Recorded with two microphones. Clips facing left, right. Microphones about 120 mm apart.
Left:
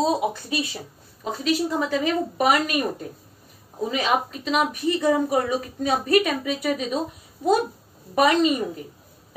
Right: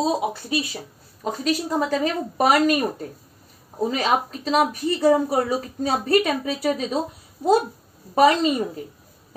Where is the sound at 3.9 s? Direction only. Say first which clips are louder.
Right 1 dB; 35° right (ahead or behind).